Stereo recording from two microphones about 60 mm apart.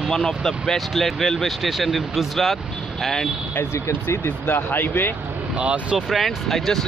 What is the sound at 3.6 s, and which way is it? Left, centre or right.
Speech, left.